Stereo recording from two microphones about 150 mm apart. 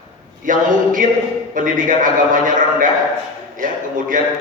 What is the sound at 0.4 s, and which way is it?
A man's voice, 60° right (ahead or behind).